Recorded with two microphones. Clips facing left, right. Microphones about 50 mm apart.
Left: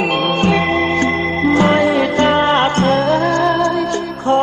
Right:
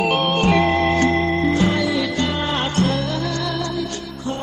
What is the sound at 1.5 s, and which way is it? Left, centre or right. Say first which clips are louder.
Music: left 7 dB; left.